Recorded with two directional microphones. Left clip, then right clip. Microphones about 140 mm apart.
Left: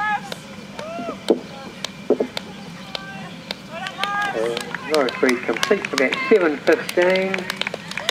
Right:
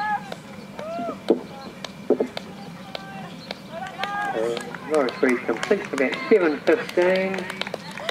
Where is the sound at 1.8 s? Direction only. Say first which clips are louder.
Left 2 dB; 15° left (ahead or behind).